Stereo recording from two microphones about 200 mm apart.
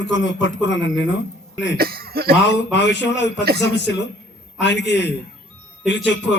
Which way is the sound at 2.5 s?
60° left (ahead or behind).